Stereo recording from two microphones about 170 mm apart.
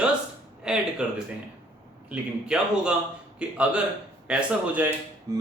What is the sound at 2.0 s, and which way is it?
A man's voice, 5° right (ahead or behind).